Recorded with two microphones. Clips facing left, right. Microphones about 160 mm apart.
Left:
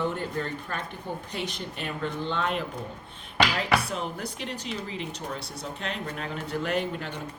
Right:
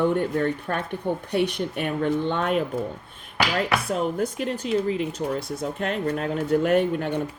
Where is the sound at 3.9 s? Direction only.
45° right (ahead or behind).